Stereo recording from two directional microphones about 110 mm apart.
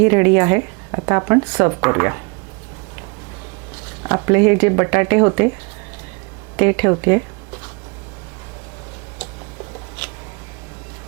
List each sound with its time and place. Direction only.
0.0 s speech: 20° right (ahead or behind)
3.8 s speech: 25° right (ahead or behind)
6.6 s speech: 25° right (ahead or behind)